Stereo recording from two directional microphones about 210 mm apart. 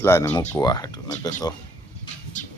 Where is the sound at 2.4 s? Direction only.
35° left (ahead or behind).